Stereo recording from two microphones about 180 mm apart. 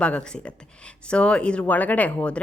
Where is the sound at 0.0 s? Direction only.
5° left (ahead or behind).